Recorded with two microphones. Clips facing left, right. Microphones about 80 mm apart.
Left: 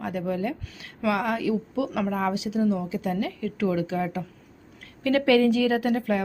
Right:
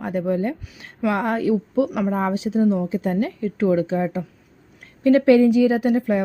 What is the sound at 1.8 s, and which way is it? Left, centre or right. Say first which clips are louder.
Speech: right 4 dB; centre.